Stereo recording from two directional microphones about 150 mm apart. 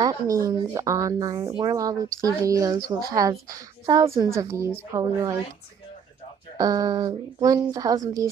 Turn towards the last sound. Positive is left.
turn(degrees=-25)  # may be behind; listen again after turning